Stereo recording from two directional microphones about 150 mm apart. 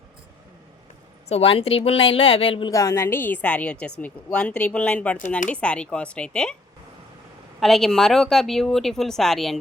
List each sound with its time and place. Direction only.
1.3 s a woman's voice: 40° left (ahead or behind)
2.7 s a woman's voice: 20° left (ahead or behind)
7.6 s a woman's voice: centre (ahead or behind)